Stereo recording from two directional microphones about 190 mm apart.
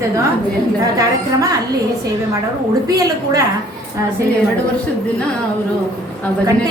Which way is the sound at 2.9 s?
15° right (ahead or behind).